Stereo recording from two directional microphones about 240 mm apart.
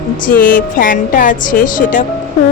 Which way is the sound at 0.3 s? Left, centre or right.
Left.